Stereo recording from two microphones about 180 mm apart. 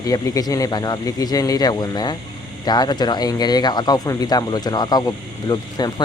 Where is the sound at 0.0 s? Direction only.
20° left (ahead or behind).